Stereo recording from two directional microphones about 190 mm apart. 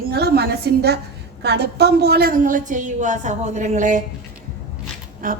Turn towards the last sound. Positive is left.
turn(degrees=-45)  # may be behind; listen again after turning